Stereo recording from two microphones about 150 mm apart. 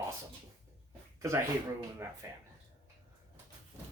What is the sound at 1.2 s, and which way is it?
Speech, 20° right (ahead or behind).